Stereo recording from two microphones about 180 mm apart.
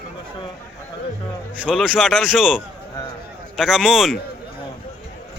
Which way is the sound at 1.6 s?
5° right (ahead or behind).